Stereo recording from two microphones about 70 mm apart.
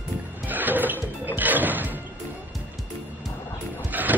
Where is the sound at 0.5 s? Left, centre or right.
Right.